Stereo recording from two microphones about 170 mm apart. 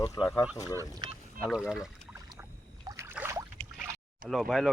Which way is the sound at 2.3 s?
20° right (ahead or behind).